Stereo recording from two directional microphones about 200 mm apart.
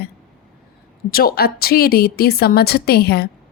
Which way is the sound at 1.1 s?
50° left (ahead or behind).